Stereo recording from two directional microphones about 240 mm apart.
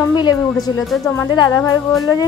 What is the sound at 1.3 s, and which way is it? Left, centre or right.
Speech, centre.